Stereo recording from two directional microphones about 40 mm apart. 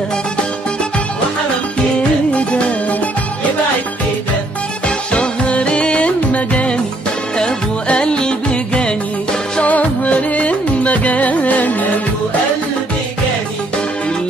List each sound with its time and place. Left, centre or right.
2.3 s music: left
4.8 s music: left
7.3 s music: left
9.6 s music: left